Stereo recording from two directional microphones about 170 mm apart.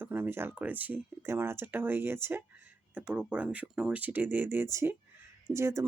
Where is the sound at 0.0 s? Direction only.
10° right (ahead or behind).